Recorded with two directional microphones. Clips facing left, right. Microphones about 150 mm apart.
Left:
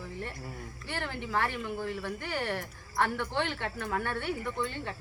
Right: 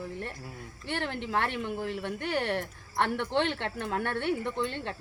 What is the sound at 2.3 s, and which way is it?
Speech, 25° right (ahead or behind).